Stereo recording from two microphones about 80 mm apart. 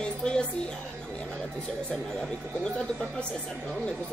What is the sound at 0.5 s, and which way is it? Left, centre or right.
Speech, centre.